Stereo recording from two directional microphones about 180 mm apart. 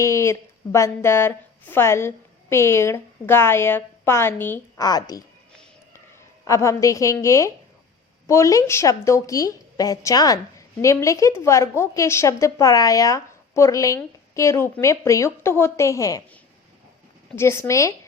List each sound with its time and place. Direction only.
0.0 s a woman's voice: 15° left (ahead or behind)
6.4 s a woman's voice: 15° left (ahead or behind)
17.3 s a woman's voice: 15° left (ahead or behind)